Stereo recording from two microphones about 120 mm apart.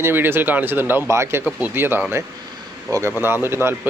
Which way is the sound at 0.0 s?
20° right (ahead or behind).